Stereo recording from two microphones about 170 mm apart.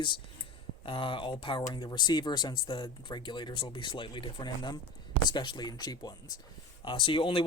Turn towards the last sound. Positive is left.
turn(degrees=30)  # may be behind; listen again after turning